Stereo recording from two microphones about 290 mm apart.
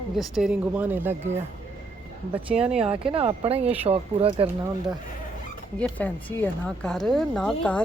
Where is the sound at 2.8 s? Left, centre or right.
Centre.